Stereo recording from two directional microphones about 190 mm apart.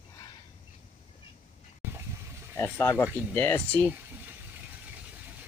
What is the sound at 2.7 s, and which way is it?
Speech, 10° left (ahead or behind).